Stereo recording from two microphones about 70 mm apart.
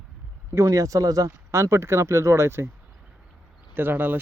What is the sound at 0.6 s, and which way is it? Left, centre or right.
Speech, right.